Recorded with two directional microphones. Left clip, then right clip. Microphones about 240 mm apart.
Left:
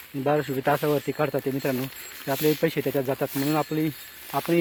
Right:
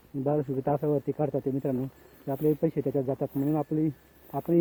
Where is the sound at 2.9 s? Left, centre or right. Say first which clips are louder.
Left 3 dB; left.